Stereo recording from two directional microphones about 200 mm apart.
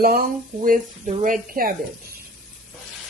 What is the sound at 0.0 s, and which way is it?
Speech, 45° right (ahead or behind).